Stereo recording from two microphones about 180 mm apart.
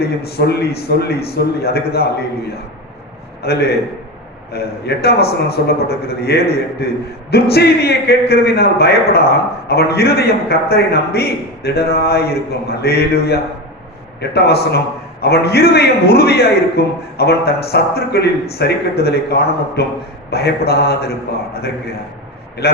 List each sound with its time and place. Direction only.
0.3 s a man's voice: 60° left (ahead or behind)
3.4 s a man's voice: 60° left (ahead or behind)